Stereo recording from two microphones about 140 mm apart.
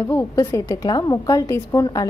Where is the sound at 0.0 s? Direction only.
20° left (ahead or behind).